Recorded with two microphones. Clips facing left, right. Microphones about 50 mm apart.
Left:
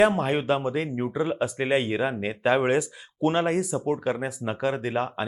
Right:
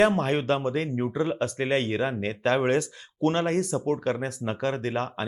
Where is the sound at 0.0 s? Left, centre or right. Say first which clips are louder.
Left 1 dB; centre.